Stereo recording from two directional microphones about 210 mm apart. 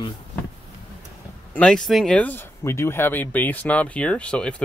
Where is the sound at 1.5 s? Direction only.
5° left (ahead or behind).